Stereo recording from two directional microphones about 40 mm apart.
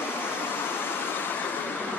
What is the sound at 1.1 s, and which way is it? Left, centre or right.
Train, left.